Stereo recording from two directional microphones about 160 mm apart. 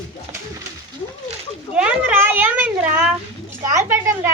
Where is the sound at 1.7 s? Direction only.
10° right (ahead or behind).